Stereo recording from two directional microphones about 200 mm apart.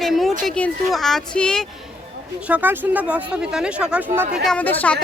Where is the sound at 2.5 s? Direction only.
10° right (ahead or behind).